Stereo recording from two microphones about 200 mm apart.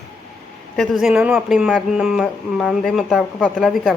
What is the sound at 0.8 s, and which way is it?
Speech, centre (ahead or behind).